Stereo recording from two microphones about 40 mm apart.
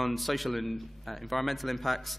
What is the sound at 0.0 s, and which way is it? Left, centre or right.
A man's voice, centre.